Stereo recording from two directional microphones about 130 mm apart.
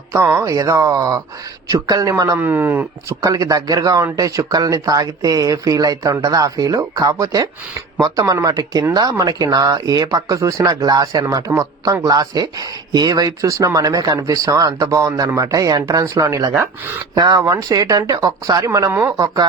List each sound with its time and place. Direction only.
0.1 s speech: 20° right (ahead or behind)
19.1 s speech: 30° right (ahead or behind)